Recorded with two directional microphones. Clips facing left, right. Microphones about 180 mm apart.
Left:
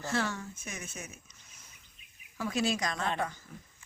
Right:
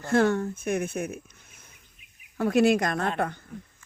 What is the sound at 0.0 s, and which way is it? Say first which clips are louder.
Speech: right 11 dB; 55° right (ahead or behind).